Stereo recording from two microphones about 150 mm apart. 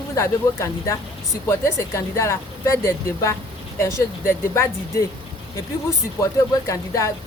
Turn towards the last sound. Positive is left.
turn(degrees=20)  # may be behind; listen again after turning